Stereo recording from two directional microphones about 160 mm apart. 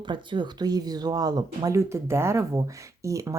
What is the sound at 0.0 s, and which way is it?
Speech, 30° right (ahead or behind).